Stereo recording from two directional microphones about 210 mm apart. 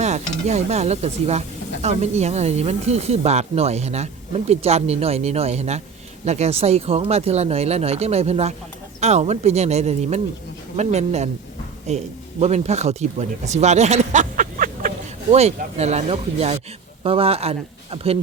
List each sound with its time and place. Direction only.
0.0 s speech: 30° right (ahead or behind)